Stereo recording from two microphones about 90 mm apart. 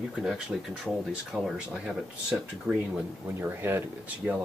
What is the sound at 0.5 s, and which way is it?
Speech, 5° right (ahead or behind).